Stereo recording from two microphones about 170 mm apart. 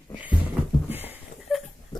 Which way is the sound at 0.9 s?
10° right (ahead or behind).